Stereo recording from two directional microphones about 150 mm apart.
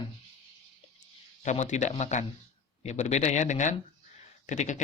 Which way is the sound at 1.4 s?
50° left (ahead or behind).